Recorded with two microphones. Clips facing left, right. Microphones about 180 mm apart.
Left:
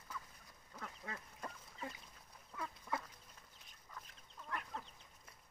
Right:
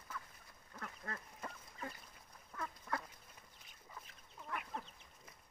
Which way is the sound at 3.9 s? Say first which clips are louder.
Even; 5° right (ahead or behind).